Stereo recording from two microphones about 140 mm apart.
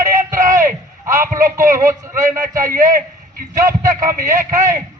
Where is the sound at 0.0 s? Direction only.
25° right (ahead or behind).